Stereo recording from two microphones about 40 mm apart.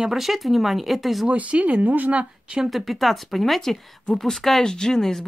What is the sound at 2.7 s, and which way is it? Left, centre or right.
Speech, centre.